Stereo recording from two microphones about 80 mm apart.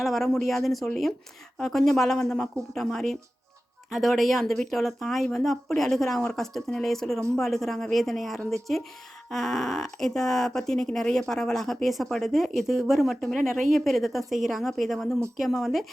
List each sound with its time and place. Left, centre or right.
0.0 s speech: centre